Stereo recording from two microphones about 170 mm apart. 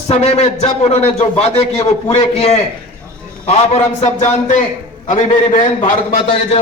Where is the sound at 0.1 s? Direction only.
40° left (ahead or behind).